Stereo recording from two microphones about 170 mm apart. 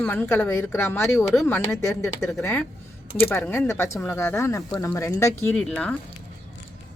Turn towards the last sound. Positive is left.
turn(degrees=5)  # may be behind; listen again after turning